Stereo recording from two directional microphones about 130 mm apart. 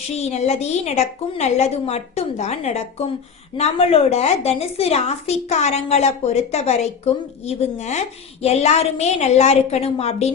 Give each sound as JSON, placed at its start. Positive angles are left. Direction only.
{"t": 0.2, "sound": "a woman's voice", "side_deg": 60}